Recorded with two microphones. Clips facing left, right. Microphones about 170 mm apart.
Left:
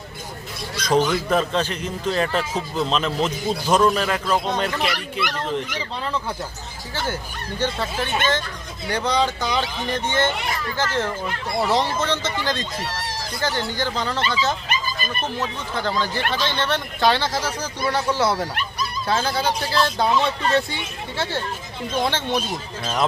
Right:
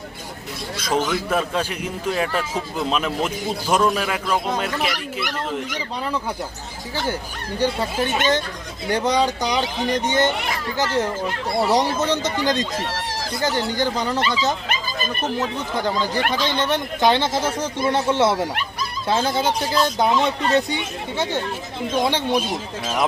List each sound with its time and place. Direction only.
0.8 s a man's voice: 5° right (ahead or behind)
7.6 s a man's voice: 15° right (ahead or behind)